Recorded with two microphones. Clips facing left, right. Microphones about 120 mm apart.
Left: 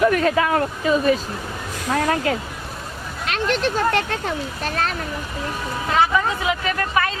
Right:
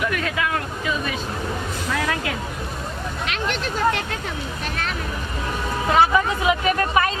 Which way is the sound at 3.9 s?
40° left (ahead or behind).